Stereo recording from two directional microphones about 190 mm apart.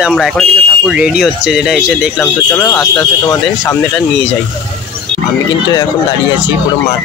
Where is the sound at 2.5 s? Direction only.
10° left (ahead or behind).